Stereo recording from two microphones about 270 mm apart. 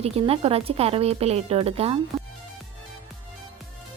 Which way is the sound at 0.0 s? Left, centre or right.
Right.